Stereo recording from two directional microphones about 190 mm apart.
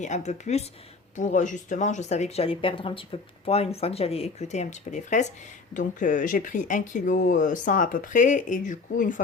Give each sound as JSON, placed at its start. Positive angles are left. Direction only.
{"t": 0.0, "sound": "speech", "side_deg": 40}